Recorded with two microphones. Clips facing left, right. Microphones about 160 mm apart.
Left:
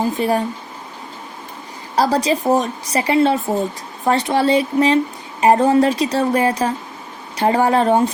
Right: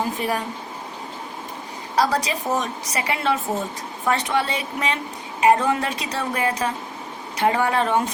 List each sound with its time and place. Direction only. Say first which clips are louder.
0.2 s a woman's voice: left 7 dB; 30° left (ahead or behind)
2.0 s a woman's voice: left 5 dB; 30° left (ahead or behind)